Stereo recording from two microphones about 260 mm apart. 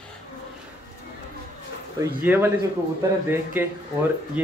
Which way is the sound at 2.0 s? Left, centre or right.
Centre.